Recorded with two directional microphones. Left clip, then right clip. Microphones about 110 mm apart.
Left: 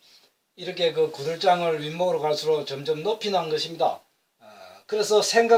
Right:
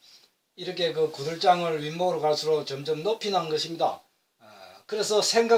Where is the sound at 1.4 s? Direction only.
20° right (ahead or behind).